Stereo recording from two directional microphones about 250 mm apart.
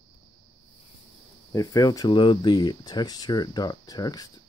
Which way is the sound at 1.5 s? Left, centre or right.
Centre.